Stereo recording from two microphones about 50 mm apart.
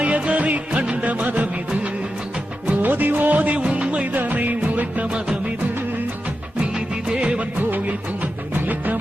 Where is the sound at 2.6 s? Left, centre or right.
Right.